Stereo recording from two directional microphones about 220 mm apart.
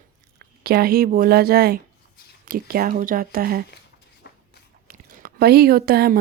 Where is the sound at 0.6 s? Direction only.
45° right (ahead or behind).